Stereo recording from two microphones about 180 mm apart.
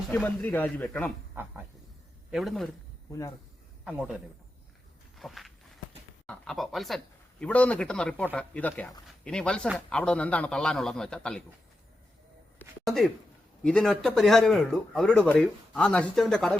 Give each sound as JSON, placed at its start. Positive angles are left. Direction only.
{"t": 0.1, "sound": "speech", "side_deg": 5}
{"t": 2.3, "sound": "speech", "side_deg": 0}
{"t": 3.1, "sound": "speech", "side_deg": 20}
{"t": 3.8, "sound": "speech", "side_deg": -5}
{"t": 5.1, "sound": "walk", "side_deg": 0}
{"t": 6.2, "sound": "speech", "side_deg": 5}
{"t": 12.5, "sound": "a sound", "side_deg": 0}
{"t": 13.7, "sound": "speech", "side_deg": 5}